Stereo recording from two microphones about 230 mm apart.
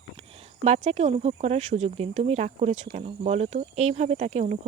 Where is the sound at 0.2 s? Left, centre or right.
Right.